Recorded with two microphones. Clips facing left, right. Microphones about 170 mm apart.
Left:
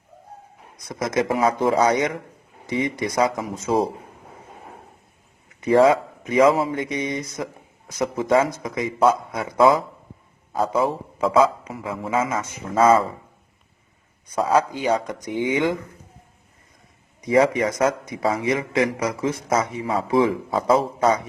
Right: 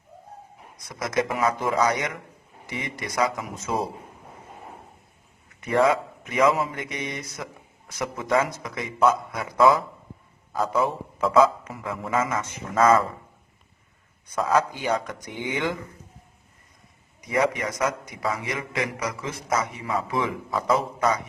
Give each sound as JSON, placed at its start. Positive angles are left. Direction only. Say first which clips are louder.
{"t": 0.9, "sound": "a man's voice", "louder": "left 4 dB", "side_deg": 20}
{"t": 5.5, "sound": "a man's voice", "louder": "left 5 dB", "side_deg": 25}
{"t": 14.3, "sound": "a man's voice", "louder": "left 3 dB", "side_deg": 25}
{"t": 17.2, "sound": "a man's voice", "louder": "left 6 dB", "side_deg": 25}